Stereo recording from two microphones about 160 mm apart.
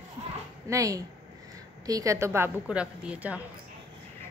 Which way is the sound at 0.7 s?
20° right (ahead or behind).